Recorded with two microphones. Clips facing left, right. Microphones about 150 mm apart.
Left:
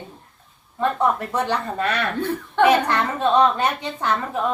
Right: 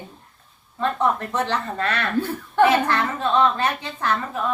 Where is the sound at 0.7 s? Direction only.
10° left (ahead or behind).